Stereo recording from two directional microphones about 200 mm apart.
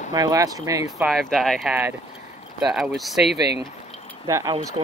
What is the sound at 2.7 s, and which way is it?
Speech, centre (ahead or behind).